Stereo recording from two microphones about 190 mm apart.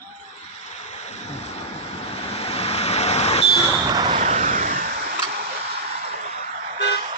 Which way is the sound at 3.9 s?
20° right (ahead or behind).